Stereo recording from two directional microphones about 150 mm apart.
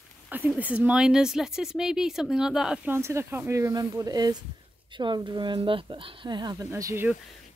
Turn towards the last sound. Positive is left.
turn(degrees=-15)  # may be behind; listen again after turning